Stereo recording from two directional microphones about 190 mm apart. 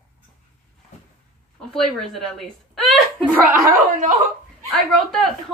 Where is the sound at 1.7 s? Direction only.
Centre (ahead or behind).